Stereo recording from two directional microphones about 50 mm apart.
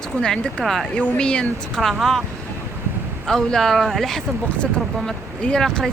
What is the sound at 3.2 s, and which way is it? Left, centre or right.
Speech, centre.